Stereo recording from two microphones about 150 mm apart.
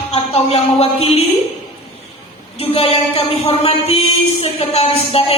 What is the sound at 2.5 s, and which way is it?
A woman's voice, 40° left (ahead or behind).